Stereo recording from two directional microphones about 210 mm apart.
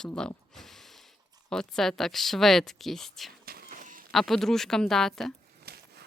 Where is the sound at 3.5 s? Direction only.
45° right (ahead or behind).